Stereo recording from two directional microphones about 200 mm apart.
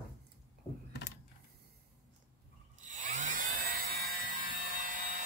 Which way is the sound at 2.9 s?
40° right (ahead or behind).